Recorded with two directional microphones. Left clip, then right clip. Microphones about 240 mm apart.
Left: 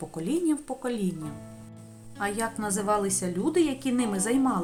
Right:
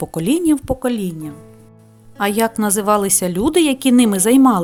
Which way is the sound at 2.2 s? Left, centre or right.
Right.